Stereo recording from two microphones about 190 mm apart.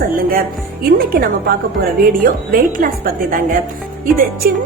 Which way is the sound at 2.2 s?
50° right (ahead or behind).